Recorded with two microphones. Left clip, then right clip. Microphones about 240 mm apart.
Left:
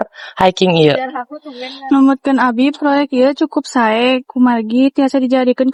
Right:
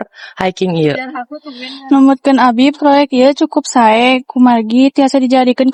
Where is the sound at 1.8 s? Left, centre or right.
Right.